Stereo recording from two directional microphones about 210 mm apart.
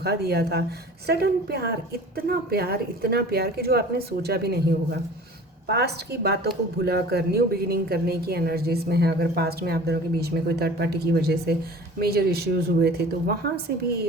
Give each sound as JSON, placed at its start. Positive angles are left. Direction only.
{"t": 0.0, "sound": "speech", "side_deg": -50}